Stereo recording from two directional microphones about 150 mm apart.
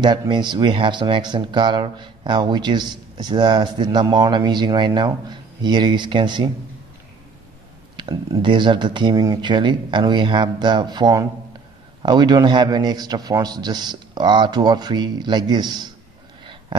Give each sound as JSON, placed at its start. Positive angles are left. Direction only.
{"t": 0.0, "sound": "speech", "side_deg": -30}
{"t": 7.9, "sound": "a man's voice", "side_deg": -30}